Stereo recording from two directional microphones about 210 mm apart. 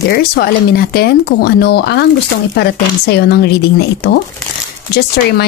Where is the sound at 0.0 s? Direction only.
45° left (ahead or behind).